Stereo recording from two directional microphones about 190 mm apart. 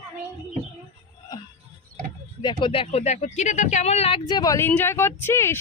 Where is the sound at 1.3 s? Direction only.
20° left (ahead or behind).